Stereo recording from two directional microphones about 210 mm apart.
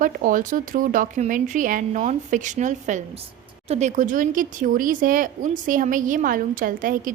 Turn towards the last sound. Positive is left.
turn(degrees=-40)  # may be behind; listen again after turning